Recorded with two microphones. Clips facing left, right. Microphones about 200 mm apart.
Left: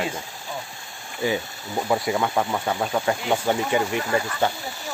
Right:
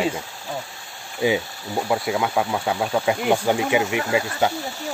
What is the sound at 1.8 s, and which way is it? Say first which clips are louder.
Speech: even; centre (ahead or behind).